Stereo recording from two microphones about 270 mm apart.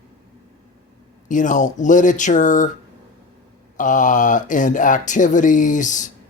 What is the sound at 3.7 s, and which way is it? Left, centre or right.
Speech, left.